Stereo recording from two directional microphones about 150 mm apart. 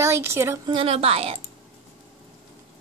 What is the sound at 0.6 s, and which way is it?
Speech, 35° right (ahead or behind).